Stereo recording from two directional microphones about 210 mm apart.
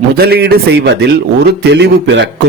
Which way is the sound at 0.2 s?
50° right (ahead or behind).